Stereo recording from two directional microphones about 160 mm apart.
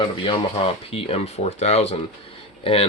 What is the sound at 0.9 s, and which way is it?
Speech, 35° left (ahead or behind).